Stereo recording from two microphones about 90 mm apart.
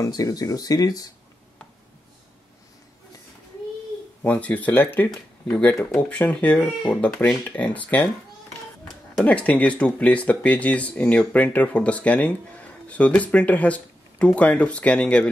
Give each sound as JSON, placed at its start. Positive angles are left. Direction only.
{"t": 0.0, "sound": "speech", "side_deg": 45}
{"t": 4.2, "sound": "speech", "side_deg": 20}
{"t": 9.2, "sound": "speech", "side_deg": 15}